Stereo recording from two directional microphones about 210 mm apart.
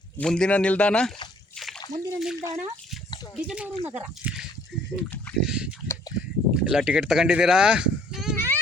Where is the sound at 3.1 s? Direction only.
20° left (ahead or behind).